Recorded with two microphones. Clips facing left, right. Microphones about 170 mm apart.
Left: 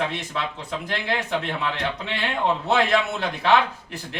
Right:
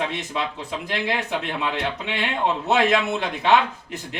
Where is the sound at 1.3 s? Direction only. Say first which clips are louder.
Even; 15° right (ahead or behind).